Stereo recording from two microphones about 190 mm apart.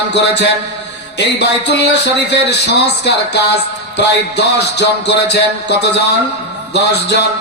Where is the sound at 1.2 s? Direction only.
65° left (ahead or behind).